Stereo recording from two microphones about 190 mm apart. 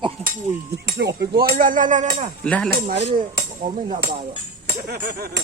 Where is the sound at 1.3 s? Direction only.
50° right (ahead or behind).